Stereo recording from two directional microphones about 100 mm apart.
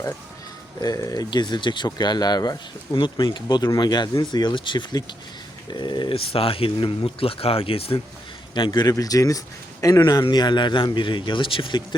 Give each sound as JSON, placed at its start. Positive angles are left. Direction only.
{"t": 0.8, "sound": "speech", "side_deg": 40}
{"t": 8.5, "sound": "speech", "side_deg": 50}